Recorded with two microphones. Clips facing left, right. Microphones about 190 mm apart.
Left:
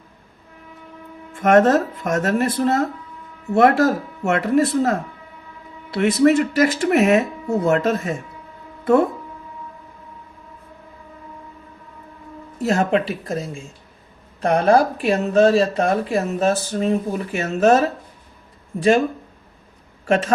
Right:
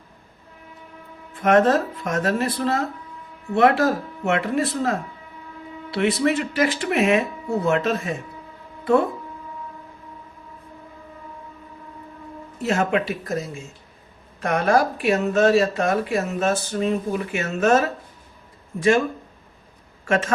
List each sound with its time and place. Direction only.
1.3 s speech: 45° left (ahead or behind)
12.6 s speech: 35° left (ahead or behind)
20.1 s speech: 35° left (ahead or behind)